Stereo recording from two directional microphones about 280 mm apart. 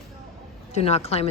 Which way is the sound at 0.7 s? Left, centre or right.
Left.